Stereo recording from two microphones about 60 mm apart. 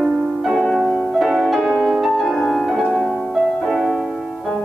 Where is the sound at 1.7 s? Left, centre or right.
Centre.